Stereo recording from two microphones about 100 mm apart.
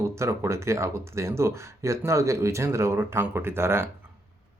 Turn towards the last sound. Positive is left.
turn(degrees=-25)  # may be behind; listen again after turning